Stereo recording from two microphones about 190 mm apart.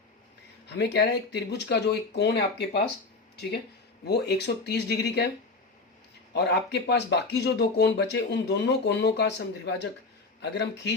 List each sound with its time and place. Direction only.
0.7 s speech: 60° left (ahead or behind)
4.0 s speech: 60° left (ahead or behind)
6.3 s speech: 60° left (ahead or behind)